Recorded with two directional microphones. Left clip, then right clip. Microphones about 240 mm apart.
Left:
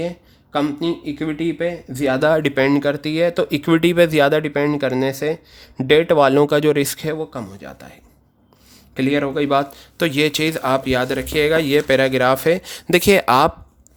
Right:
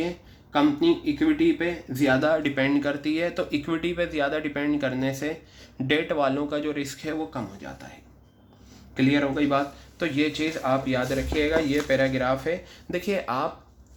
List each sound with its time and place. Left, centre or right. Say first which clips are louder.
0.5 s speech: left 1 dB; left
9.0 s speech: left 4 dB; left